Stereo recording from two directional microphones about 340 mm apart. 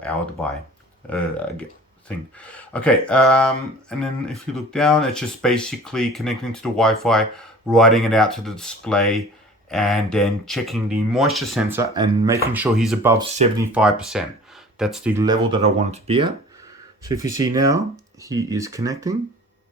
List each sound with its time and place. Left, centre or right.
2.0 s speech: centre
13.2 s speech: centre
13.7 s speech: centre